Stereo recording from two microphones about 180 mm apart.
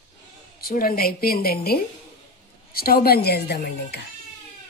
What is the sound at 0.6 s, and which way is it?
A woman's voice, 55° left (ahead or behind).